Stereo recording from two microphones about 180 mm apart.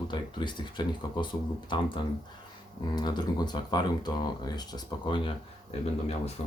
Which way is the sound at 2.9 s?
25° left (ahead or behind).